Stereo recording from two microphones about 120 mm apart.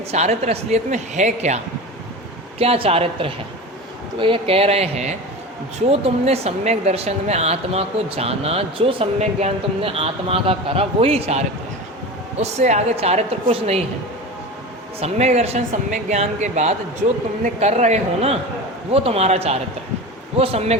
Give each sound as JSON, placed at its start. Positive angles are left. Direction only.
{"t": 0.1, "sound": "speech", "side_deg": -60}
{"t": 2.6, "sound": "speech", "side_deg": -55}
{"t": 12.4, "sound": "speech", "side_deg": -70}
{"t": 15.0, "sound": "speech", "side_deg": -65}